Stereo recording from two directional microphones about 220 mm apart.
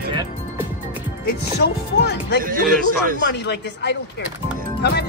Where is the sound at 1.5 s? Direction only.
45° left (ahead or behind).